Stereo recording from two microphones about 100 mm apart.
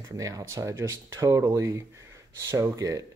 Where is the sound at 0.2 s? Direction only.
35° right (ahead or behind).